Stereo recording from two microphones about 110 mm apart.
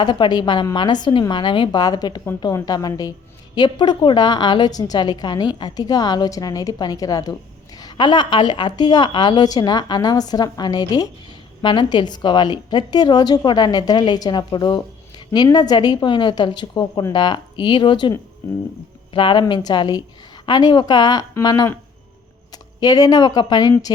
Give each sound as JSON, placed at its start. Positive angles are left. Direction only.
{"t": 0.0, "sound": "a woman's voice", "side_deg": 45}
{"t": 11.6, "sound": "a woman's voice", "side_deg": 45}
{"t": 19.1, "sound": "a woman's voice", "side_deg": 50}